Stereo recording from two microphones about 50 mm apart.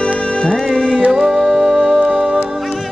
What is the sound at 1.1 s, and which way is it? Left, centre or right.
Music, centre.